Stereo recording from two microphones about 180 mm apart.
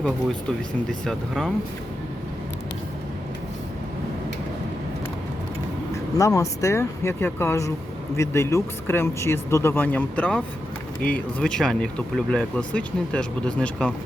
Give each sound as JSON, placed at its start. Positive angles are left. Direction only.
{"t": 0.0, "sound": "speech", "side_deg": 5}
{"t": 6.1, "sound": "speech", "side_deg": 15}